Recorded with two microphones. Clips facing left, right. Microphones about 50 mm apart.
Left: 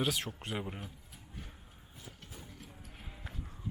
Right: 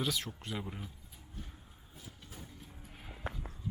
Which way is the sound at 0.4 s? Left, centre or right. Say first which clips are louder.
Left 2 dB; centre.